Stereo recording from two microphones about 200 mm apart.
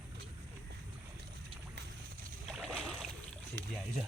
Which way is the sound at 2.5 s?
Centre (ahead or behind).